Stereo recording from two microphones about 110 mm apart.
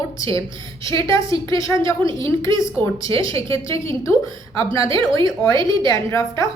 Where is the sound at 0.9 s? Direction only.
30° left (ahead or behind).